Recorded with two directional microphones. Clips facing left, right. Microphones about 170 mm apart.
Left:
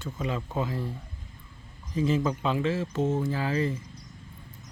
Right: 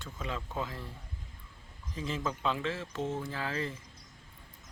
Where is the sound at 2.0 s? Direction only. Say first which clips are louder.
Left 10 dB; 5° left (ahead or behind).